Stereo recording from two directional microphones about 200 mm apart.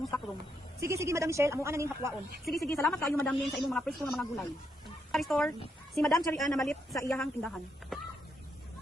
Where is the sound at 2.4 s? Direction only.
Centre (ahead or behind).